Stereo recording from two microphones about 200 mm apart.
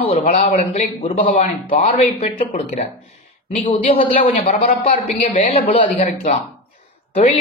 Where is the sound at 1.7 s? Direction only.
30° left (ahead or behind).